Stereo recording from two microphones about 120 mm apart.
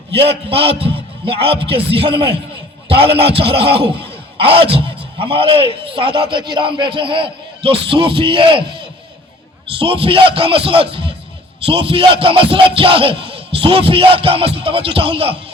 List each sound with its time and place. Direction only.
0.3 s speech: 50° right (ahead or behind)